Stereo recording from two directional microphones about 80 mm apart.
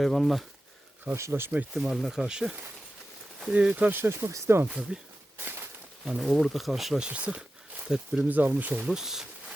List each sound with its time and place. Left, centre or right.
0.0 s speech: centre
1.1 s speech: right
1.7 s speech: centre; by 4.6 s right
4.6 s speech: centre
5.4 s a sound: right
6.1 s speech: centre
7.1 s speech: centre
8.3 s speech: right
8.9 s a sound: centre